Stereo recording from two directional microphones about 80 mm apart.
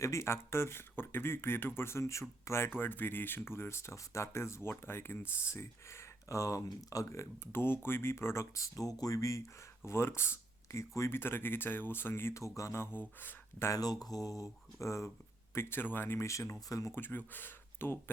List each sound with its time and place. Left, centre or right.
0.0 s speech: left
13.7 s speech: left
15.5 s speech: left
16.9 s speech: left